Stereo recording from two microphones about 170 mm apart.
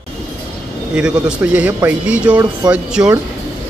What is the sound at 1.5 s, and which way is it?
Speech, 10° right (ahead or behind).